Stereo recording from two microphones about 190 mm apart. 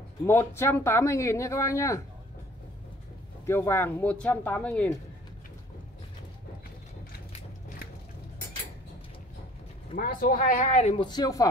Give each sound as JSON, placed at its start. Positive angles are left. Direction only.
{"t": 0.2, "sound": "speech", "side_deg": 10}
{"t": 3.4, "sound": "speech", "side_deg": 15}
{"t": 9.9, "sound": "speech", "side_deg": 50}
{"t": 11.1, "sound": "speech", "side_deg": 20}